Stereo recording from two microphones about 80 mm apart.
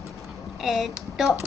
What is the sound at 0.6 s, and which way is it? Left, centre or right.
Child singing, centre.